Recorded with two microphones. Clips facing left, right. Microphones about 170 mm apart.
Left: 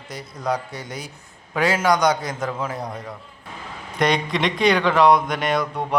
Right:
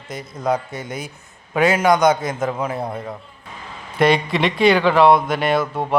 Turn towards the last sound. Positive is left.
turn(degrees=-5)  # may be behind; listen again after turning